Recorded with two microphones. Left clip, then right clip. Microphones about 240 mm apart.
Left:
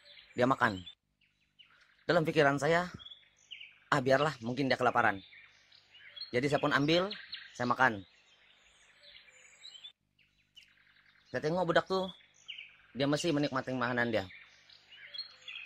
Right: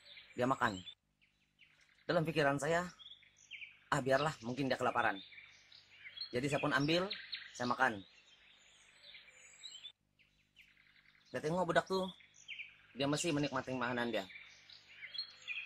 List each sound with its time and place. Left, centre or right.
0.4 s speech: left
2.0 s speech: left
3.9 s speech: left
6.3 s speech: centre
7.1 s bird: centre
7.5 s speech: left
11.2 s speech: centre
14.3 s a sound: centre
15.3 s bird: centre